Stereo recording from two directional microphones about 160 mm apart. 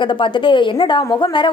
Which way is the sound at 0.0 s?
30° left (ahead or behind).